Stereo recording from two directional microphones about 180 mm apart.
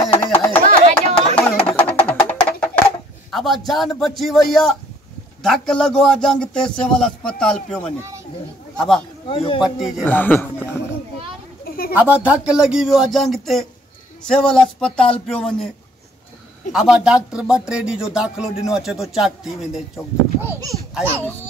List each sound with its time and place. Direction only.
0.1 s a sound: 10° left (ahead or behind)
1.6 s music: 5° left (ahead or behind)
3.3 s a sound: centre (ahead or behind)
4.0 s a man's voice: centre (ahead or behind)
9.3 s a man's voice: 30° left (ahead or behind)
9.6 s a man's voice: centre (ahead or behind)
10.0 s speech: 10° left (ahead or behind)
11.6 s a sound: 55° left (ahead or behind)
11.9 s a man's voice: 10° right (ahead or behind)
16.7 s a man's voice: 5° right (ahead or behind)
20.9 s speech: 10° right (ahead or behind)